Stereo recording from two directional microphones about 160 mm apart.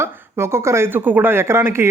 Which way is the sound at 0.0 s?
15° right (ahead or behind).